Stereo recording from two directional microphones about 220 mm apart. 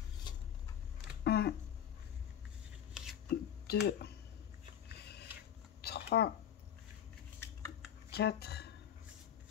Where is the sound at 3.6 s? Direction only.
45° left (ahead or behind).